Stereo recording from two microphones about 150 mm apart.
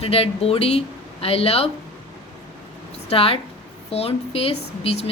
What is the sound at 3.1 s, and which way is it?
A woman's voice, 40° left (ahead or behind).